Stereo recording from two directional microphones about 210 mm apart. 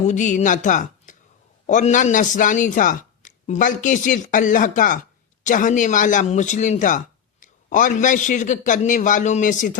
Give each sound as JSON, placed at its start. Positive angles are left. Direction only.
{"t": 0.1, "sound": "speech", "side_deg": 35}